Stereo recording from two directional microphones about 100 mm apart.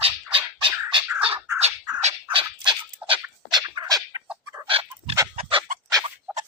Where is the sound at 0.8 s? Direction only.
60° right (ahead or behind).